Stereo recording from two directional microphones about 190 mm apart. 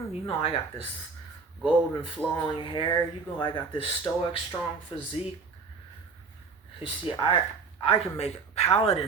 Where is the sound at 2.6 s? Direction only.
25° left (ahead or behind).